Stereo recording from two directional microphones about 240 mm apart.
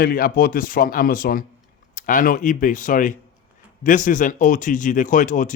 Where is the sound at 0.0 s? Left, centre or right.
Left.